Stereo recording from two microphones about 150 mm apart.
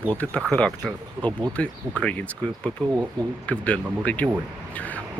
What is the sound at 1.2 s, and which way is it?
Speech, 10° left (ahead or behind).